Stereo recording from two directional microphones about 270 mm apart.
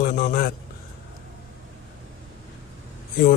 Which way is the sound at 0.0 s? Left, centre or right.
Left.